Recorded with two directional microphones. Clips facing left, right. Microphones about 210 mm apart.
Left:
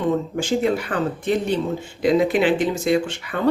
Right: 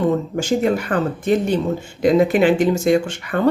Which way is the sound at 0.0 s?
45° right (ahead or behind).